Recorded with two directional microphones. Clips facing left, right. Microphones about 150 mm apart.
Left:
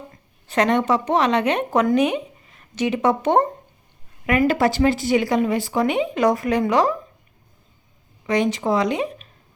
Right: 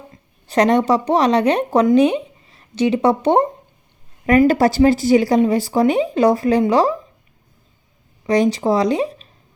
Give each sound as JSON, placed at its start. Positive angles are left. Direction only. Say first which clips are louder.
{"t": 0.4, "sound": "speech", "louder": "right 4 dB", "side_deg": -35}
{"t": 8.3, "sound": "speech", "louder": "right 4 dB", "side_deg": -35}